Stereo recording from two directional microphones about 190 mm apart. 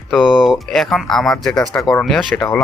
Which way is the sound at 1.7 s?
15° left (ahead or behind).